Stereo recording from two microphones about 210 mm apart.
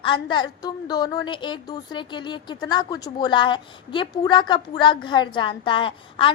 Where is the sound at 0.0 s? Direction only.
20° left (ahead or behind).